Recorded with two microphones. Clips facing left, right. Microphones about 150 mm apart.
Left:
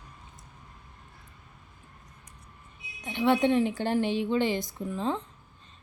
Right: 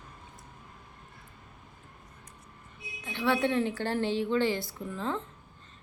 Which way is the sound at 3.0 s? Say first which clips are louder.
Left 4 dB; 20° left (ahead or behind).